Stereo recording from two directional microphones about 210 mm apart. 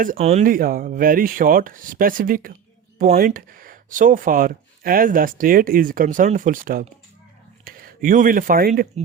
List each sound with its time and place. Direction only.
0.0 s speech: 35° right (ahead or behind)
0.4 s speech: 45° right (ahead or behind)